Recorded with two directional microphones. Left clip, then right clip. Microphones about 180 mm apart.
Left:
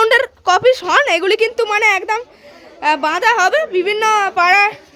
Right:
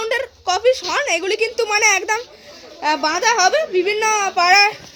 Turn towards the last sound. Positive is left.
turn(degrees=10)  # may be behind; listen again after turning